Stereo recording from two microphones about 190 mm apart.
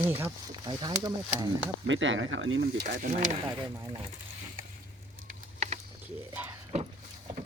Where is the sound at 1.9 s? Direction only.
85° right.